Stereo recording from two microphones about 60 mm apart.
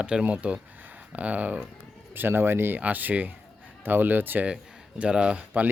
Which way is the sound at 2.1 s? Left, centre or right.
Right.